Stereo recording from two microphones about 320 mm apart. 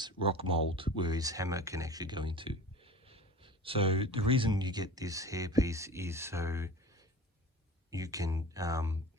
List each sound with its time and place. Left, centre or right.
0.0 s speech: centre
7.9 s speech: centre